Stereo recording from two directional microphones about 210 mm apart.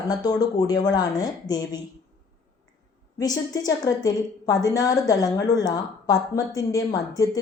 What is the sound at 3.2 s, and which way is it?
A woman's voice, 20° left (ahead or behind).